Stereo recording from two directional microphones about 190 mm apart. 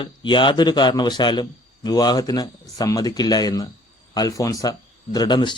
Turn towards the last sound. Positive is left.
turn(degrees=25)  # may be behind; listen again after turning